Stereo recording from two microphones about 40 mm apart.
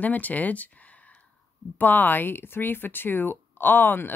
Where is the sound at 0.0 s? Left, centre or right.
Left.